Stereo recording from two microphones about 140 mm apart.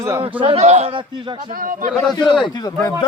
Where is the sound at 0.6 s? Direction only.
50° right (ahead or behind).